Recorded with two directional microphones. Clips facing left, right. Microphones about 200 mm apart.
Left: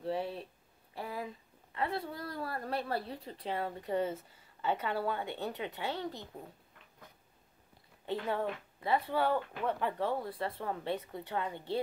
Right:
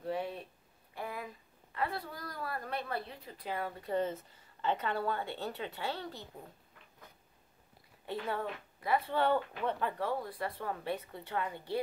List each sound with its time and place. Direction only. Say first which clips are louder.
0.0 s a sound: left 1 dB; 30° left (ahead or behind)
3.1 s speech: left 3 dB; 30° left (ahead or behind)
3.9 s a woman's voice: even; 10° left (ahead or behind)
8.0 s a woman's voice: left 2 dB; 20° left (ahead or behind)
9.1 s speech: right 1 dB; 5° left (ahead or behind)
9.8 s speech: left 1 dB; 15° left (ahead or behind)